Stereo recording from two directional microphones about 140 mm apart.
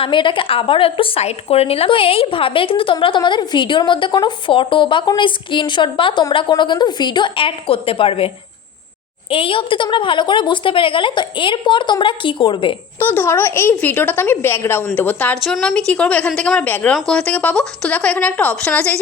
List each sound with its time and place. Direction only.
0.0 s a woman's voice: 35° left (ahead or behind)
9.3 s a woman's voice: 40° left (ahead or behind)
13.0 s a woman's voice: 15° left (ahead or behind)
15.4 s a woman's voice: centre (ahead or behind)